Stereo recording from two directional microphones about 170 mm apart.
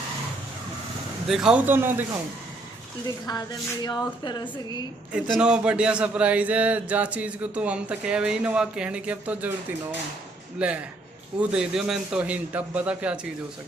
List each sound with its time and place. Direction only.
1.3 s speech: 5° right (ahead or behind)
3.8 s speech: 25° left (ahead or behind)
5.1 s speech: 5° right (ahead or behind)
10.6 s speech: 5° right (ahead or behind)